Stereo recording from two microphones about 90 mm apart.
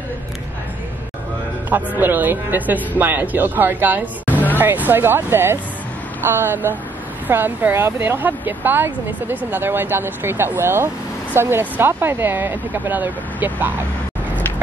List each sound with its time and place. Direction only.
2.0 s speech: 20° right (ahead or behind)